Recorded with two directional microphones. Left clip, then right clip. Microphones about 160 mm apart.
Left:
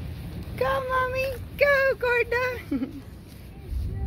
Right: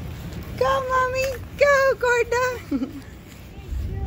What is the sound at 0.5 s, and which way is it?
Speech, centre (ahead or behind).